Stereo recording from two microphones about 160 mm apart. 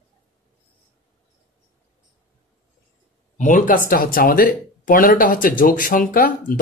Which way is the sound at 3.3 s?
50° left (ahead or behind).